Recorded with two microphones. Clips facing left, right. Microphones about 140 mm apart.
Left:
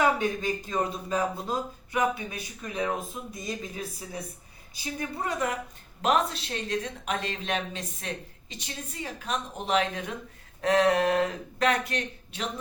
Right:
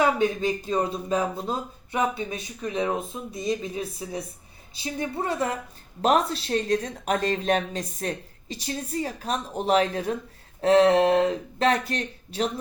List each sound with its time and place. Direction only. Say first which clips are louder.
0.0 s speech: right 3 dB; 20° right (ahead or behind)